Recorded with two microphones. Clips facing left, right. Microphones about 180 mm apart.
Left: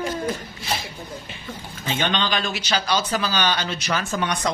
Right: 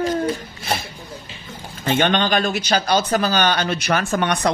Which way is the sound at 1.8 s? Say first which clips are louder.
Right 6 dB; 55° right (ahead or behind).